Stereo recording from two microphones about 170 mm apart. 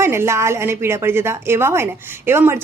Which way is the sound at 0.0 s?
15° right (ahead or behind).